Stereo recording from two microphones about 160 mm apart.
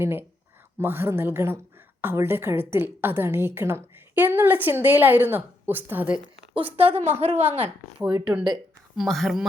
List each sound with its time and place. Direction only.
0.0 s a woman's voice: 15° right (ahead or behind)
6.5 s a woman's voice: 35° right (ahead or behind)
6.9 s a woman's voice: 15° right (ahead or behind)